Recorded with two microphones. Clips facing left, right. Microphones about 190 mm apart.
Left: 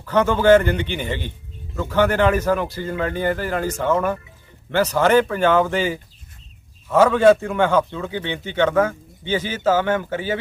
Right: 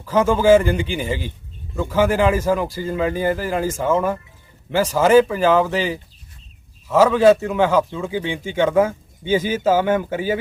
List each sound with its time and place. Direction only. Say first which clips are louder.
0.0 s a man's voice: right 1 dB; 5° right (ahead or behind)